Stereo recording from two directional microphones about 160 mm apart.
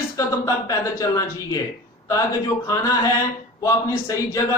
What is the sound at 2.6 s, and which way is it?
A man's voice, 20° left (ahead or behind).